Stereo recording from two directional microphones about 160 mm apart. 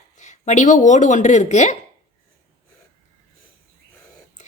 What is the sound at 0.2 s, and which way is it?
Speech, 45° left (ahead or behind).